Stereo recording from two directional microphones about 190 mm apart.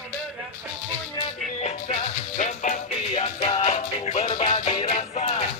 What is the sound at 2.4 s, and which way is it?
Music, 40° left (ahead or behind).